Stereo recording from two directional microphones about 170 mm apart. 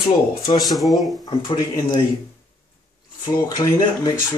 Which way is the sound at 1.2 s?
25° left (ahead or behind).